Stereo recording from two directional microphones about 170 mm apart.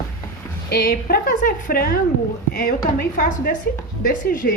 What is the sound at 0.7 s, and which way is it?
A woman's voice, 60° left (ahead or behind).